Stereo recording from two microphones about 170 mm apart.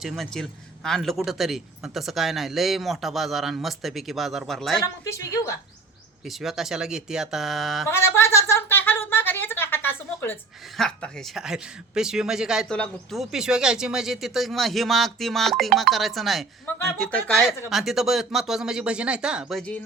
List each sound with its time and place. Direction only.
0.0 s speech: centre (ahead or behind)
5.0 s speech: 20° left (ahead or behind)
6.2 s speech: centre (ahead or behind)
7.9 s a sound: 15° left (ahead or behind)
10.8 s speech: 5° left (ahead or behind)
16.6 s speech: 10° left (ahead or behind)